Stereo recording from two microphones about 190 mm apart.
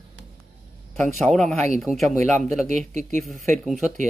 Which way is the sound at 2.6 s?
40° right (ahead or behind).